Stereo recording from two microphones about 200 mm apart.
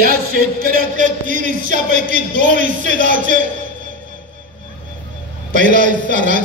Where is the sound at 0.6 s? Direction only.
45° right (ahead or behind).